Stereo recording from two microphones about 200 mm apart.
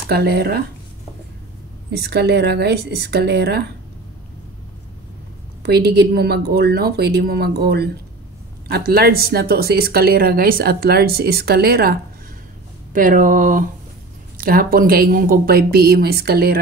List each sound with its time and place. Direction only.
0.1 s a woman's voice: 55° right (ahead or behind)
1.9 s speech: 55° right (ahead or behind)
5.6 s a woman's voice: 55° right (ahead or behind)